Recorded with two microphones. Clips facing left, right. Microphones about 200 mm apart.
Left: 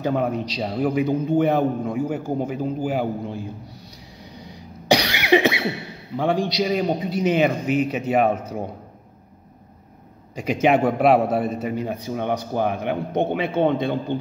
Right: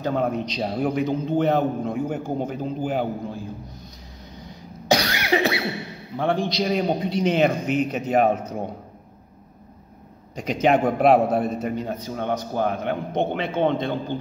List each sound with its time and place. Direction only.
0.0 s a man's voice: 15° left (ahead or behind)
0.3 s a man's voice: centre (ahead or behind)
4.8 s cough: 15° left (ahead or behind)
6.1 s a man's voice: 15° left (ahead or behind)
10.3 s a man's voice: 5° left (ahead or behind)